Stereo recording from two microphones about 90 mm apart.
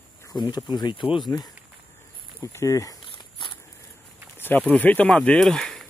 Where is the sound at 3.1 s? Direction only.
65° left (ahead or behind).